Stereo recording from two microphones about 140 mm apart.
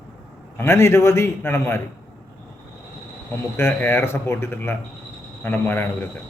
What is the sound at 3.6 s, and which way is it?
A man's voice, 15° left (ahead or behind).